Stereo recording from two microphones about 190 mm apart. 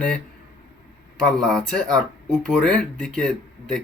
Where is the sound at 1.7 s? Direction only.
Centre (ahead or behind).